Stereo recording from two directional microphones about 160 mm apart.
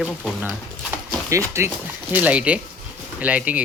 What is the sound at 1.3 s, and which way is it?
Speech, 20° right (ahead or behind).